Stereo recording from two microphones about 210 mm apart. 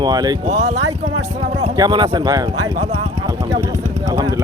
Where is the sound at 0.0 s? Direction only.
20° right (ahead or behind).